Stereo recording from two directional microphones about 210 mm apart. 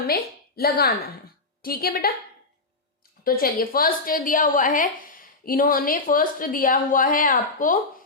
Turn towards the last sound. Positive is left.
turn(degrees=40)  # may be behind; listen again after turning